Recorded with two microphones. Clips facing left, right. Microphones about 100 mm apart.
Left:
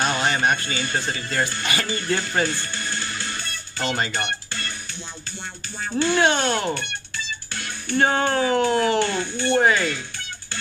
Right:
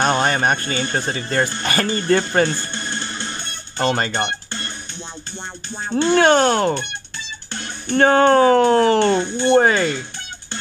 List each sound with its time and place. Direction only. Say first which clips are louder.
0.0 s music: right 4 dB; 50° right (ahead or behind)
0.9 s speech: right 4 dB; 40° right (ahead or behind)
2.7 s music: right 2 dB; 25° right (ahead or behind)
3.7 s speech: right 6 dB; 50° right (ahead or behind)
4.1 s music: right 4 dB; 25° right (ahead or behind)
6.1 s speech: right 8 dB; 50° right (ahead or behind)
7.9 s speech: right 7 dB; 45° right (ahead or behind)
9.1 s speech: right 7 dB; 20° right (ahead or behind)
9.5 s speech: right 4 dB; 45° right (ahead or behind)